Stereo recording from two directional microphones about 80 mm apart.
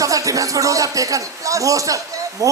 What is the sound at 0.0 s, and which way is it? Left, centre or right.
Speech, right.